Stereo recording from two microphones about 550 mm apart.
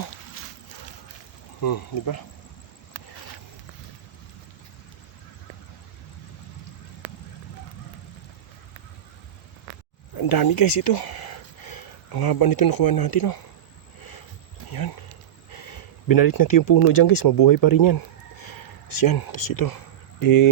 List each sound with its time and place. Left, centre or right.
1.6 s speech: left
10.2 s speech: left
16.0 s speech: left